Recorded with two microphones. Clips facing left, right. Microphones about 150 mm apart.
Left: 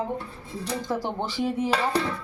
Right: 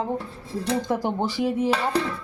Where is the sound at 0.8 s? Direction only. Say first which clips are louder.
Right 4 dB; 10° right (ahead or behind).